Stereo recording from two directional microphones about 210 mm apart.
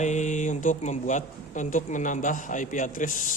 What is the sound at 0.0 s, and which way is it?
Speech, 35° left (ahead or behind).